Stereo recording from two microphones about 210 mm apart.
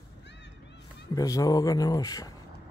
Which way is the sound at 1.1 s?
15° left (ahead or behind).